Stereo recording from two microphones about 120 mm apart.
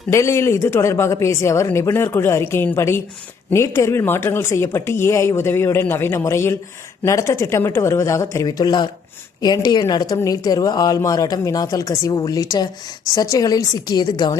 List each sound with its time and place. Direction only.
0.1 s a woman's voice: 25° left (ahead or behind)